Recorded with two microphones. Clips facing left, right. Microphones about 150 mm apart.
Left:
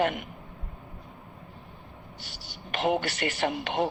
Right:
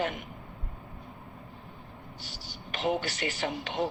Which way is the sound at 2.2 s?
65° left (ahead or behind).